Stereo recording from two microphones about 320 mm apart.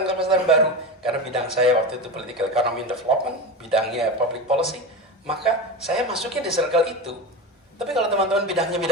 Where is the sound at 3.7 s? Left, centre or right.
Centre.